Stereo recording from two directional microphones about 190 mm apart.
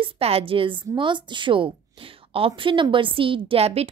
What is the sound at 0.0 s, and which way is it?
A woman's voice, 30° right (ahead or behind).